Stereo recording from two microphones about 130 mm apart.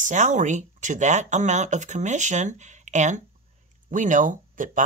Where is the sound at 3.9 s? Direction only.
75° right (ahead or behind).